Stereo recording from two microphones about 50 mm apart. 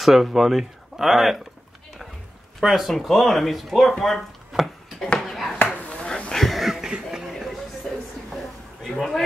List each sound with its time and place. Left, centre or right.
0.0 s speech: centre
2.6 s speech: centre
4.5 s chopping: centre
5.2 s a sound: centre
5.8 s chop: left
6.3 s a sound: centre
6.9 s chuckle: centre
7.2 s a sound: centre
8.9 s a man's voice: centre